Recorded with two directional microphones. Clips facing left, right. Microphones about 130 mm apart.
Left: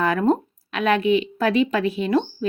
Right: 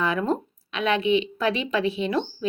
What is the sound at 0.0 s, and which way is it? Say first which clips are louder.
A woman's voice: left 5 dB; 45° left (ahead or behind).